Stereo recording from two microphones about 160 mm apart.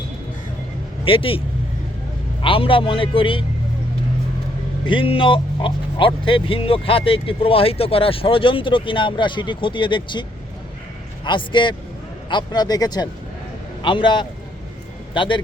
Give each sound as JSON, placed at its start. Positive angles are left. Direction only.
{"t": 1.0, "sound": "speech", "side_deg": 35}
{"t": 2.4, "sound": "speech", "side_deg": 35}
{"t": 4.9, "sound": "speech", "side_deg": 35}
{"t": 11.3, "sound": "a man's voice", "side_deg": 30}